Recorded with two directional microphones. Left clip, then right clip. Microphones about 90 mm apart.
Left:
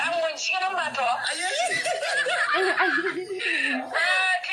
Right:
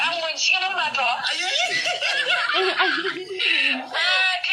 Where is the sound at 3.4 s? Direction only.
60° left (ahead or behind); by 4.4 s 80° left.